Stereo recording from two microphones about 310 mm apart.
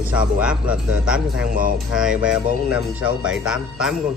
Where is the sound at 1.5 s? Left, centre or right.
Right.